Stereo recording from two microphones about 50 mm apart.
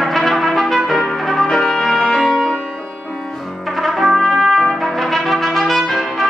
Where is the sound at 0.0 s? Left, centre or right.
Centre.